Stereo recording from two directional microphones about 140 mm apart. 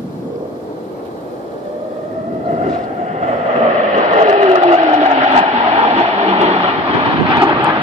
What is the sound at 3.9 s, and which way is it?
Vehicle, 55° right (ahead or behind).